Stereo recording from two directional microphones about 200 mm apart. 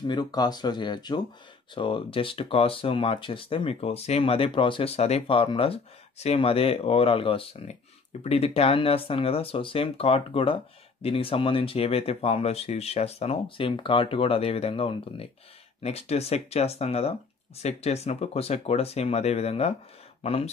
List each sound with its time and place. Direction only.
0.0 s speech: 20° left (ahead or behind)